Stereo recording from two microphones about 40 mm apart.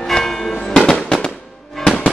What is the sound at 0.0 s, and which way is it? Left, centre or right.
Church bell, centre.